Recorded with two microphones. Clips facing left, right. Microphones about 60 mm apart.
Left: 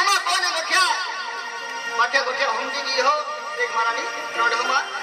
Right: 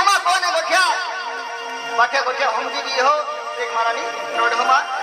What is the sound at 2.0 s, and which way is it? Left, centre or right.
Speech, right.